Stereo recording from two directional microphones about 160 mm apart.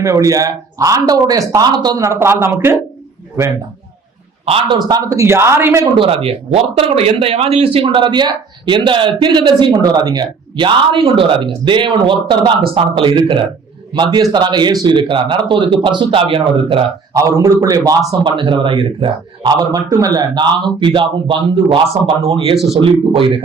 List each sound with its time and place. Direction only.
0.0 s a man's voice: 20° right (ahead or behind)
4.4 s speech: 35° right (ahead or behind); by 5.9 s 15° right (ahead or behind)
6.0 s a man's voice: 35° right (ahead or behind)
17.2 s a man's voice: 20° right (ahead or behind); by 22.5 s 40° right (ahead or behind)
22.5 s speech: centre (ahead or behind)